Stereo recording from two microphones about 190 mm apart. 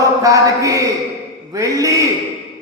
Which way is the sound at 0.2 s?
15° right (ahead or behind).